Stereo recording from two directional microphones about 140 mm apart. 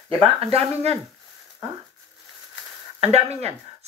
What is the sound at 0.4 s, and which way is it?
Speech, 45° right (ahead or behind).